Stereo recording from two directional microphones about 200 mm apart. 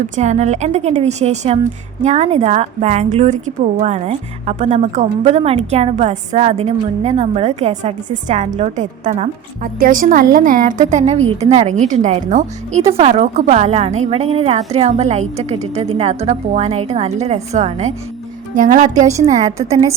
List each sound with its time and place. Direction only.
0.2 s a woman's voice: 35° right (ahead or behind)
19.1 s a woman's voice: 20° right (ahead or behind)